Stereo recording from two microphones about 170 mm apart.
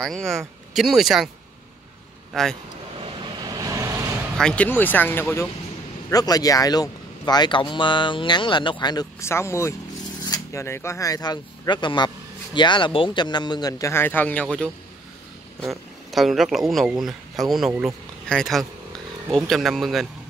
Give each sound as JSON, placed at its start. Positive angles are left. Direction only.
{"t": 0.0, "sound": "speech", "side_deg": 0}
{"t": 2.3, "sound": "speech", "side_deg": 5}
{"t": 3.1, "sound": "vehicle", "side_deg": -20}
{"t": 4.4, "sound": "speech", "side_deg": 5}
{"t": 16.1, "sound": "speech", "side_deg": 0}